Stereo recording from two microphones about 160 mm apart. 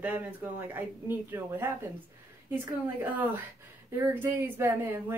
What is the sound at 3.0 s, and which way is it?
A woman's voice, 10° right (ahead or behind).